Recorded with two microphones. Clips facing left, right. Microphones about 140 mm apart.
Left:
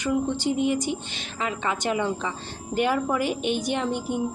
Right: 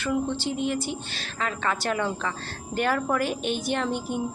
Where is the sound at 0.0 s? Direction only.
15° left (ahead or behind).